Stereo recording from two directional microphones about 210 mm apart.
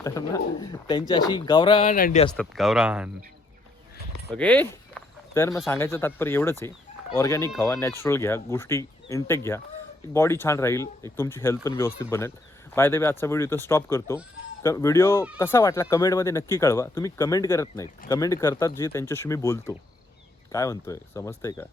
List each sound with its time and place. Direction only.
0.0 s speech: 15° left (ahead or behind)
1.9 s speech: 40° left (ahead or behind)
2.3 s speech: centre (ahead or behind)
4.3 s speech: 5° left (ahead or behind)